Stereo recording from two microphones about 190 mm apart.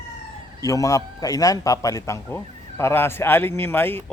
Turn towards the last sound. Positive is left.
turn(degrees=10)  # may be behind; listen again after turning